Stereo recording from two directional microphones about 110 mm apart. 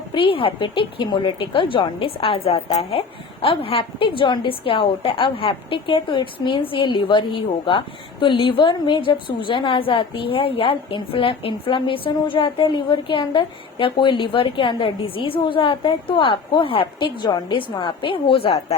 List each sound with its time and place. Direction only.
0.1 s a woman's voice: 50° left (ahead or behind)